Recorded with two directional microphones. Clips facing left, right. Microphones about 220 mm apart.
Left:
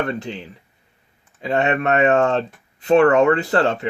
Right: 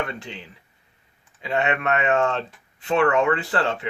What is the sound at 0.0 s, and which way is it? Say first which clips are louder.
Speech: left 6 dB; 40° left (ahead or behind).